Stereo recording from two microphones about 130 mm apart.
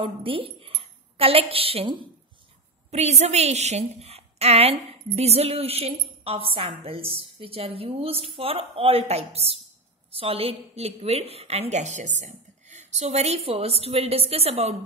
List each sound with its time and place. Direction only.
0.0 s a woman's voice: 45° right (ahead or behind)